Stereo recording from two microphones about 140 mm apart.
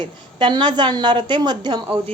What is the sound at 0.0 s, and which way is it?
A woman's voice, 35° right (ahead or behind).